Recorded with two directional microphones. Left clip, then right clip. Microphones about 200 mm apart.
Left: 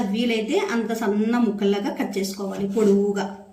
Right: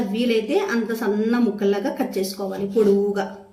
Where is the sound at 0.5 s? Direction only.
Centre (ahead or behind).